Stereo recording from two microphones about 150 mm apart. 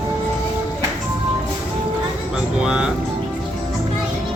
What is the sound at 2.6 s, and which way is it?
Music, 5° right (ahead or behind).